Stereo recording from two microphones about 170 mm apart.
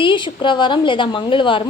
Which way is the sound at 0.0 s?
30° left (ahead or behind).